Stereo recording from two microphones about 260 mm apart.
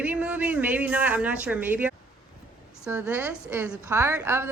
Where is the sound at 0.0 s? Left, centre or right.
Centre.